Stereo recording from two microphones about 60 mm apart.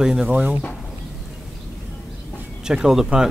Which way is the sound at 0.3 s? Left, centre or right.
Right.